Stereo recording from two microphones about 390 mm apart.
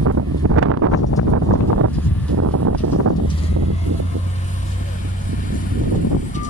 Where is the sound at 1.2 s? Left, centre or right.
Left.